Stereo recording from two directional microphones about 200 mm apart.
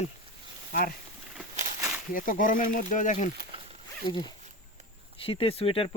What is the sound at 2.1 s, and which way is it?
Speech, 40° left (ahead or behind).